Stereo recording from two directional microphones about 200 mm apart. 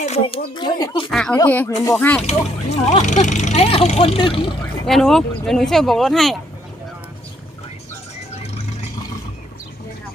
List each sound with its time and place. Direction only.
0.0 s speech: 35° left (ahead or behind)
0.5 s speech: 20° left (ahead or behind)
1.1 s speech: 5° left (ahead or behind)
2.2 s speech: 30° left (ahead or behind)
4.9 s speech: centre (ahead or behind)